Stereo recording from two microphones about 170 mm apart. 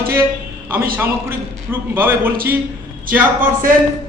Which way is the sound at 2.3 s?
60° right (ahead or behind).